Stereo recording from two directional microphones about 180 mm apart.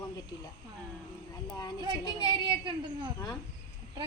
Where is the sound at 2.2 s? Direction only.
25° right (ahead or behind).